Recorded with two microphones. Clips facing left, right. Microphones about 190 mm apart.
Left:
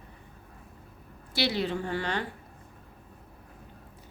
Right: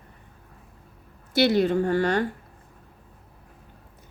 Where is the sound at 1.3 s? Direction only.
50° right (ahead or behind).